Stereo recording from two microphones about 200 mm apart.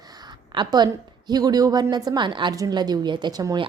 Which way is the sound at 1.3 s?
20° right (ahead or behind).